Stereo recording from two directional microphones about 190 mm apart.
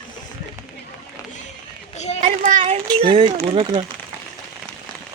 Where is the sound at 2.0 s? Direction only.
35° left (ahead or behind).